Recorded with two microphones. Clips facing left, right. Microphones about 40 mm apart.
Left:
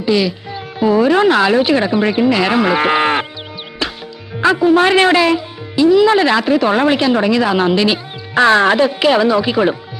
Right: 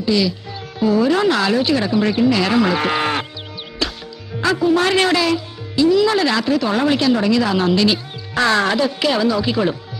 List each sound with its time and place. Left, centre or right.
0.0 s speech: left
3.8 s music: left
4.4 s speech: left